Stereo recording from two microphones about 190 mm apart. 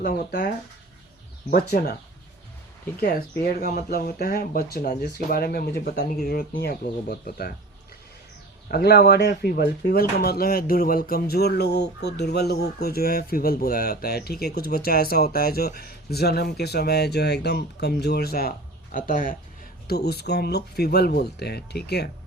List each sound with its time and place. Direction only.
0.0 s speech: 55° left (ahead or behind)
1.7 s speech: 55° left (ahead or behind)
3.0 s speech: 55° left (ahead or behind)
8.7 s speech: 55° left (ahead or behind)
19.9 s speech: 60° left (ahead or behind)